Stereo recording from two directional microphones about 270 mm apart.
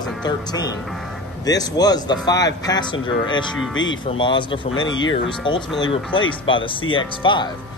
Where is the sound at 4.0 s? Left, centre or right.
Centre.